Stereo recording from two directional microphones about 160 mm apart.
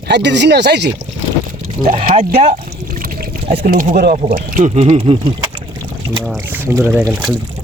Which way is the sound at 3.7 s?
60° right (ahead or behind).